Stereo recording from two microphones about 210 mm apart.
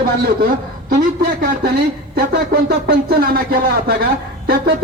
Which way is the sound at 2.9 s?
45° right (ahead or behind).